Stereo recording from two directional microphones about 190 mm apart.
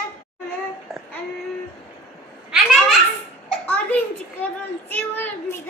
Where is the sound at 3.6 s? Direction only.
10° left (ahead or behind).